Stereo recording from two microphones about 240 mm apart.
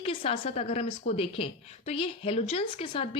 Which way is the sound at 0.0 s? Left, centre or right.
Left.